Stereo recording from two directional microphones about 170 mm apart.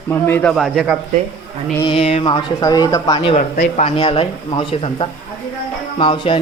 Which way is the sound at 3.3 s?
45° left (ahead or behind).